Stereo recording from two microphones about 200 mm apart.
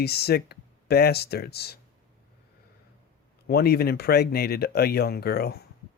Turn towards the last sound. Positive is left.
turn(degrees=50)  # may be behind; listen again after turning